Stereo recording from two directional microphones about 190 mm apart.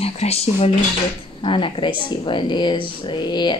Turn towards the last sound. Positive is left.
turn(degrees=25)  # may be behind; listen again after turning